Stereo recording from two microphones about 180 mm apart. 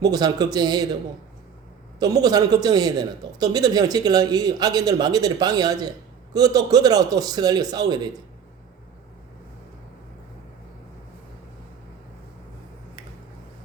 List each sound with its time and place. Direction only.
0.0 s a man's voice: 20° right (ahead or behind)
2.0 s a man's voice: 20° right (ahead or behind)